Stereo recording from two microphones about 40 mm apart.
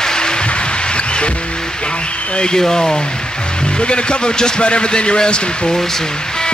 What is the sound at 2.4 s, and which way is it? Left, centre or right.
Speech, centre.